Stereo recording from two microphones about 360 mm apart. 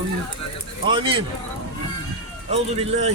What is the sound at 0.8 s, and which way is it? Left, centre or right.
Speech, centre.